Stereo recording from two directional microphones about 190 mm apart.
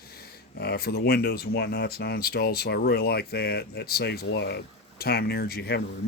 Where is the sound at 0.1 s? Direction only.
55° left (ahead or behind).